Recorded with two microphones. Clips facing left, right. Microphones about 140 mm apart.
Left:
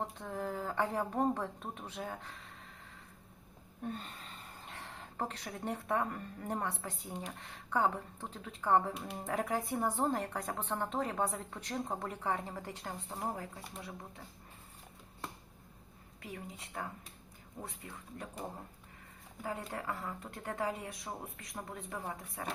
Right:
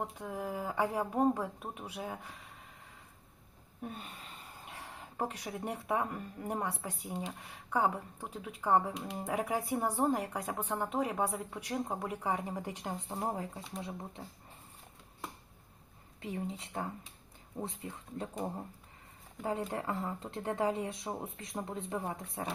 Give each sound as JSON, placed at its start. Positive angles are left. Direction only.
{"t": 0.0, "sound": "a woman's voice", "side_deg": -10}
{"t": 3.8, "sound": "speech", "side_deg": -10}
{"t": 8.9, "sound": "speech", "side_deg": 0}
{"t": 9.2, "sound": "a woman's voice", "side_deg": -10}
{"t": 16.2, "sound": "speech", "side_deg": -25}
{"t": 19.4, "sound": "speech", "side_deg": -25}